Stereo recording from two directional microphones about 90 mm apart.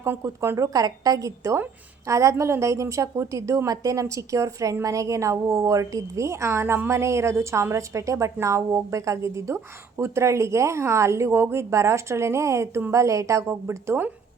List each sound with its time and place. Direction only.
0.0 s a woman's voice: 30° right (ahead or behind)